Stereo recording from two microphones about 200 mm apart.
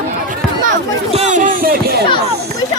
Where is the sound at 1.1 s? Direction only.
40° right (ahead or behind).